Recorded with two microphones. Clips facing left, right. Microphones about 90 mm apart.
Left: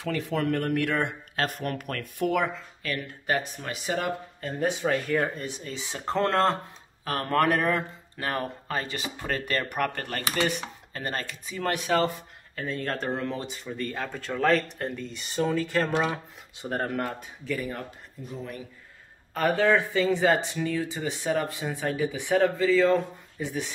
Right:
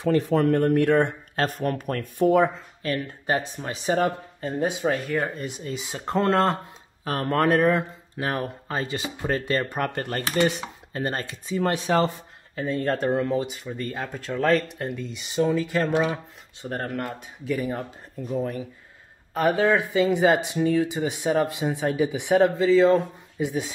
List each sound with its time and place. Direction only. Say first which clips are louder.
0.1 s speech: right 7 dB; 40° right (ahead or behind)
4.5 s speech: right 2 dB; 15° right (ahead or behind)
5.1 s speech: even; 5° right (ahead or behind)
16.6 s speech: even; 10° left (ahead or behind)
17.1 s speech: right 4 dB; 15° right (ahead or behind)
19.3 s speech: right 2 dB; 15° right (ahead or behind)